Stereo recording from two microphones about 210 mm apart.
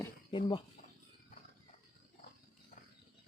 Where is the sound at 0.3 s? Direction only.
25° left (ahead or behind).